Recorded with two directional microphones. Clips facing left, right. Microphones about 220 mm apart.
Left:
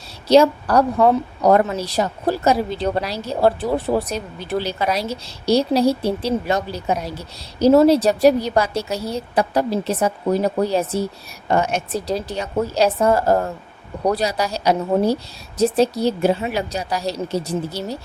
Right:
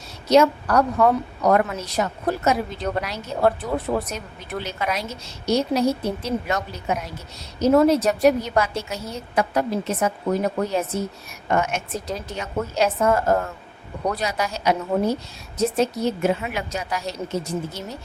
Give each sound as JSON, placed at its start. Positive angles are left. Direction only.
{"t": 0.3, "sound": "a woman's voice", "side_deg": 30}